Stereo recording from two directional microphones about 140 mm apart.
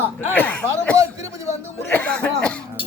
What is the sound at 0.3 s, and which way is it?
Speech, 10° left (ahead or behind).